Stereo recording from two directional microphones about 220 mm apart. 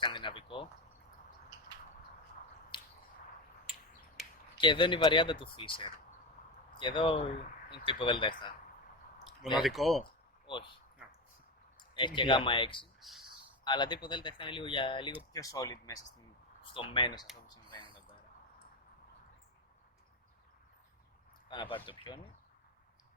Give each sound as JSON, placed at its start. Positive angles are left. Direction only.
{"t": 0.0, "sound": "speech", "side_deg": 20}
{"t": 2.7, "sound": "squish", "side_deg": 20}
{"t": 4.5, "sound": "speech", "side_deg": 20}
{"t": 9.6, "sound": "speech", "side_deg": 0}
{"t": 10.4, "sound": "speech", "side_deg": 20}
{"t": 11.8, "sound": "speech", "side_deg": 20}
{"t": 13.0, "sound": "a sound", "side_deg": 0}
{"t": 13.7, "sound": "speech", "side_deg": 20}
{"t": 21.5, "sound": "speech", "side_deg": 20}